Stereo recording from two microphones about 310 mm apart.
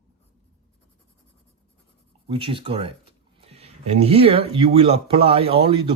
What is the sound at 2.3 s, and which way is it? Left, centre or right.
Speech, centre.